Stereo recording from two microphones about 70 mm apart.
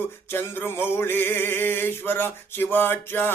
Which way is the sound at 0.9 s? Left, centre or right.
Left.